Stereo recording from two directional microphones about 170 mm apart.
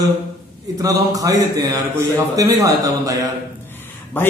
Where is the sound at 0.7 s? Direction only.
20° right (ahead or behind).